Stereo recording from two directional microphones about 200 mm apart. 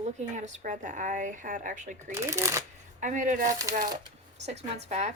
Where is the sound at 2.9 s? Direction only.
40° right (ahead or behind).